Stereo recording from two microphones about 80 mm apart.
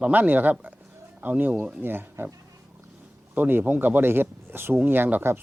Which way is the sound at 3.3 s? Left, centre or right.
Right.